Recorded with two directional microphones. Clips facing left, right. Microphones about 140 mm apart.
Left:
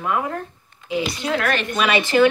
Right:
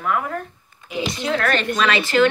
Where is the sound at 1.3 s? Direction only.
5° left (ahead or behind).